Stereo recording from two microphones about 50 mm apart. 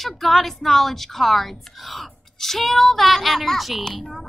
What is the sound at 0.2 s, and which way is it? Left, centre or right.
A woman's voice, centre.